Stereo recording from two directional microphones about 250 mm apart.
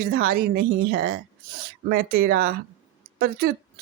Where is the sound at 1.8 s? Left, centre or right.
Right.